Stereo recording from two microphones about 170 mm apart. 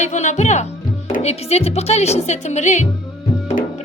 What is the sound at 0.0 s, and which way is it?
Speech, 45° left (ahead or behind).